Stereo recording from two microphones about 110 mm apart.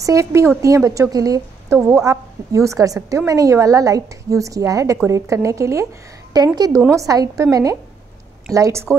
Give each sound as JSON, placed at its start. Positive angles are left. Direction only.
{"t": 0.0, "sound": "a woman's voice", "side_deg": -25}
{"t": 8.5, "sound": "a woman's voice", "side_deg": -30}